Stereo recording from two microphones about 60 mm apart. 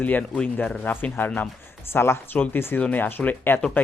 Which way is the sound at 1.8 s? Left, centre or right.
Left.